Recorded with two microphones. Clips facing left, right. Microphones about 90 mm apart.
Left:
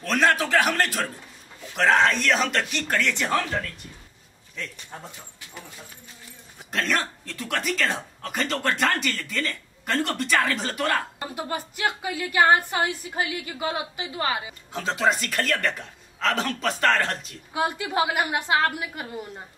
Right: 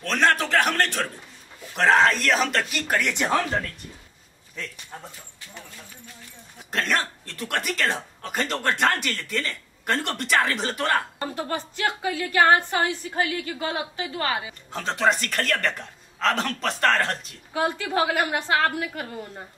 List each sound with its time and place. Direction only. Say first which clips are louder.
0.0 s speech: even; 5° left (ahead or behind); by 3.3 s 15° right (ahead or behind)
4.6 s speech: even; 5° right (ahead or behind)
6.7 s speech: right 1 dB; centre (ahead or behind)
11.3 s a woman's voice: even; 15° left (ahead or behind)
14.7 s speech: right 1 dB; 5° left (ahead or behind)
17.6 s a woman's voice: right 1 dB; 15° left (ahead or behind)